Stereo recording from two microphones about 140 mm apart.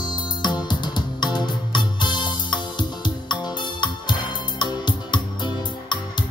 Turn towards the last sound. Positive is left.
turn(degrees=35)  # may be behind; listen again after turning